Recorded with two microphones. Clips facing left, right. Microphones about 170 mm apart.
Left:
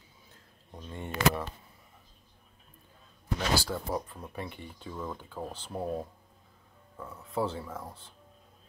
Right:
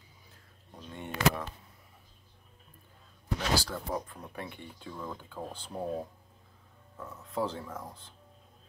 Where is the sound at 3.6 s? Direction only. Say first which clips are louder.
Left 2 dB; 10° left (ahead or behind).